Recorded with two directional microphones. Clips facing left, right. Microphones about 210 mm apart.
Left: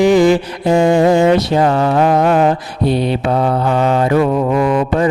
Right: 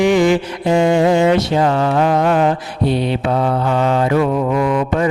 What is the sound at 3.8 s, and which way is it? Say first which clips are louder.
Mantra: left 2 dB; 45° left (ahead or behind).